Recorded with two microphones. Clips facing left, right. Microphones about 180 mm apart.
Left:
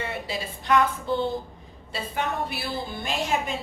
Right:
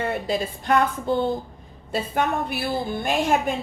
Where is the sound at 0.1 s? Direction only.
45° right (ahead or behind).